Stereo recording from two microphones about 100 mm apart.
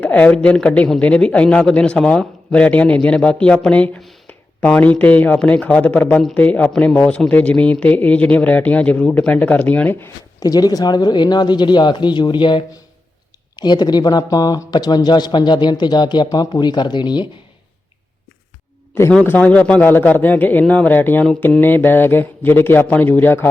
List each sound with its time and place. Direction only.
0.0 s a man's voice: 15° left (ahead or behind)
10.4 s speech: 40° left (ahead or behind)
19.2 s a man's voice: 20° left (ahead or behind)